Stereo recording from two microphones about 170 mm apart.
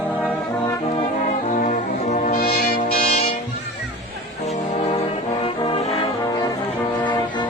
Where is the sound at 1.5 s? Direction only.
45° left (ahead or behind).